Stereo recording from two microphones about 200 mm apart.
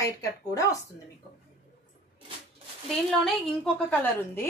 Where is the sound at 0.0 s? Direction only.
15° left (ahead or behind).